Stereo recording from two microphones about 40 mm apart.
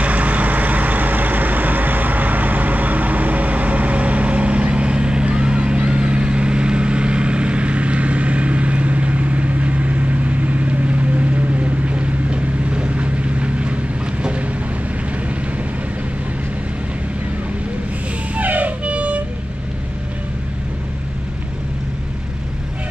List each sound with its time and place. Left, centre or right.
0.0 s vehicle: right
18.3 s music: right